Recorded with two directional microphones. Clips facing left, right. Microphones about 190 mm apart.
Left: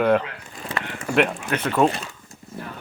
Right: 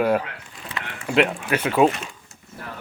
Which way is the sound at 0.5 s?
45° left (ahead or behind).